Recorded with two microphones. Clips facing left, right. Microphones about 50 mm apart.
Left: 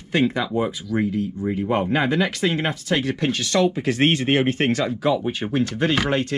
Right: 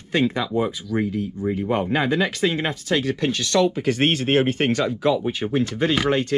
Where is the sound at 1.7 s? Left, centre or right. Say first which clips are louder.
Left 1 dB; left.